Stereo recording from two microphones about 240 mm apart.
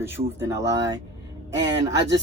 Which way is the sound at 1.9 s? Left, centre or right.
Right.